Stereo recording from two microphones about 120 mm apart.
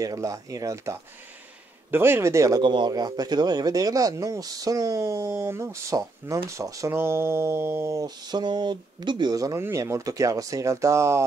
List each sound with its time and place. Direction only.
0.0 s speech: 30° right (ahead or behind)
2.6 s speech: 40° right (ahead or behind); by 11.2 s 25° right (ahead or behind)